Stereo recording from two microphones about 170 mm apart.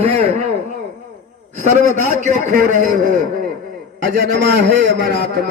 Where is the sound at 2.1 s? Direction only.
45° right (ahead or behind).